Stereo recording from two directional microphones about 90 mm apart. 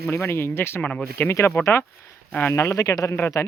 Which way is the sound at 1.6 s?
30° left (ahead or behind).